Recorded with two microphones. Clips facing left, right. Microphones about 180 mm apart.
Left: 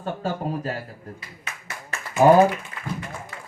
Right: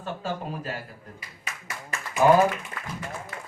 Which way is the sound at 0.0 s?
40° left (ahead or behind).